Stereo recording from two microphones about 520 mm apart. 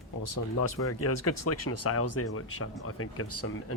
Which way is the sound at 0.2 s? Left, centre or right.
Left.